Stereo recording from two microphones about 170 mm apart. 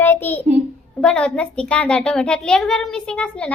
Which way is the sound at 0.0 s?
10° left (ahead or behind).